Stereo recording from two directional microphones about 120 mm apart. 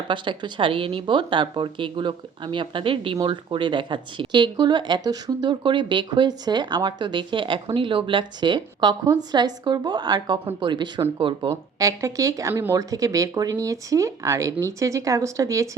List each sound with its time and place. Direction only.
0.1 s a woman's voice: 40° right (ahead or behind)
11.5 s speech: 25° right (ahead or behind)